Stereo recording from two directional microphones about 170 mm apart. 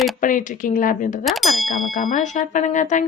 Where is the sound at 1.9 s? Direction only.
50° left (ahead or behind).